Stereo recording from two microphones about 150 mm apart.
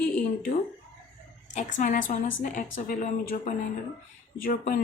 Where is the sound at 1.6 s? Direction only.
55° left (ahead or behind).